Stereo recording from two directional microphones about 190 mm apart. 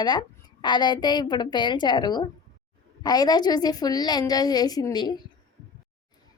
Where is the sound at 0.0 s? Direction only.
20° left (ahead or behind).